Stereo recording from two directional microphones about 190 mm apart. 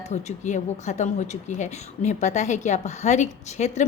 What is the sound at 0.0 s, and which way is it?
Speech, 35° left (ahead or behind).